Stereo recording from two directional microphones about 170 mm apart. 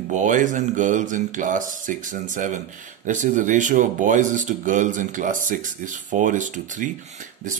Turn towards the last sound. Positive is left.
turn(degrees=-50)  # may be behind; listen again after turning